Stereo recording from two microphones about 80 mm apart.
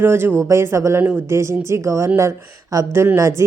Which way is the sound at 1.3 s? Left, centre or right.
Right.